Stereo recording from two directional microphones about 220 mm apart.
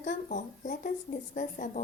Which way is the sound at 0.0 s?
35° left (ahead or behind).